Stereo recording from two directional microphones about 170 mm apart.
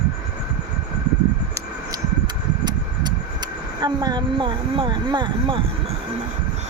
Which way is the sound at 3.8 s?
25° right (ahead or behind).